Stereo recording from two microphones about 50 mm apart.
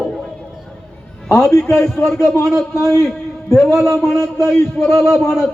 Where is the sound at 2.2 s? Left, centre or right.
Left.